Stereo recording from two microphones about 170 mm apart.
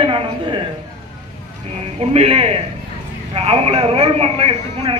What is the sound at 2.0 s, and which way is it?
A man's voice, 35° right (ahead or behind).